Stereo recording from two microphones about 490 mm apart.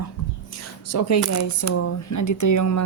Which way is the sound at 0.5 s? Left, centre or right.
Left.